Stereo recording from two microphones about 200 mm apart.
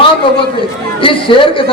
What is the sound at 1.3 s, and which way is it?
Speech, 25° left (ahead or behind).